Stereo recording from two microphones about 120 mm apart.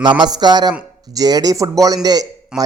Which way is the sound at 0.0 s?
40° right (ahead or behind).